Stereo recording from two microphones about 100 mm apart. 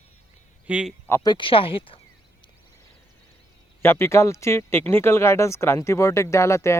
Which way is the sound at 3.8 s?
25° left (ahead or behind).